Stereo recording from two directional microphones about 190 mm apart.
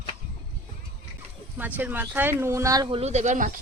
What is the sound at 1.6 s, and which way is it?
Speech, 10° right (ahead or behind).